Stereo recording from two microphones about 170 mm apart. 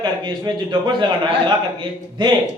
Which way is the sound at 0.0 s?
25° right (ahead or behind).